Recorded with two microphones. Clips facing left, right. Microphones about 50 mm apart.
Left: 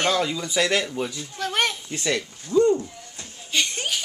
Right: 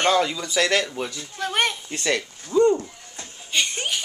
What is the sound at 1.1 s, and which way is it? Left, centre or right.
Speech, centre.